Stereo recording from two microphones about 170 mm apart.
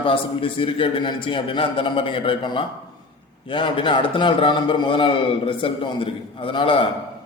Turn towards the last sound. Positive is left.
turn(degrees=30)  # may be behind; listen again after turning